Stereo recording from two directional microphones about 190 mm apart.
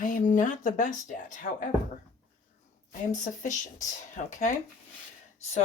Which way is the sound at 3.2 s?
40° left (ahead or behind).